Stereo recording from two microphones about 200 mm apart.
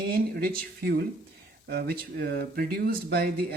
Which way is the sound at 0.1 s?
50° right (ahead or behind).